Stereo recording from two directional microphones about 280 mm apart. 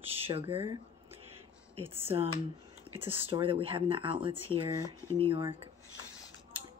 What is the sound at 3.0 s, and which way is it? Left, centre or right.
Speech, centre.